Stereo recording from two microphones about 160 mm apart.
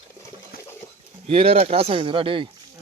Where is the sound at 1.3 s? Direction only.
40° right (ahead or behind).